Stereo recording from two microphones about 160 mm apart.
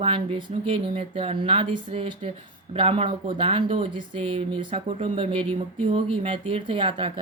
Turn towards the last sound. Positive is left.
turn(degrees=-35)  # may be behind; listen again after turning